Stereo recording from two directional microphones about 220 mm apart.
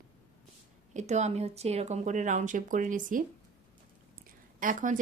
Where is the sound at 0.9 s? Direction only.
30° right (ahead or behind).